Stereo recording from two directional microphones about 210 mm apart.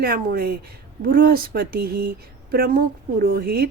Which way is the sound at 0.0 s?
45° right (ahead or behind).